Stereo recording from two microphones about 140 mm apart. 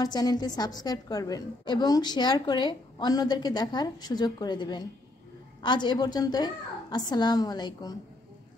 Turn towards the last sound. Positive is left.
turn(degrees=30)  # may be behind; listen again after turning